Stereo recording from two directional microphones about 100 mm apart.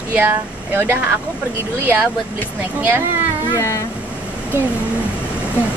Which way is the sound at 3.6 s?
30° left (ahead or behind).